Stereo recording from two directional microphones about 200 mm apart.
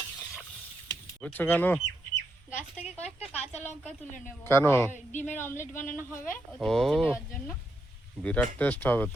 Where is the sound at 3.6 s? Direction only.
10° left (ahead or behind).